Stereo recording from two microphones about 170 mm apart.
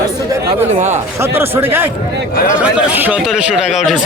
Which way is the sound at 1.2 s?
15° right (ahead or behind).